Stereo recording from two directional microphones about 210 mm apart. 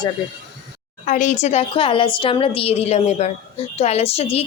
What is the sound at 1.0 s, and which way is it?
A woman's voice, 35° left (ahead or behind).